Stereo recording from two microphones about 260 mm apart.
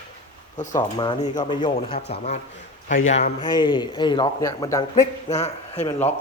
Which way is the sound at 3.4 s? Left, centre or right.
Centre.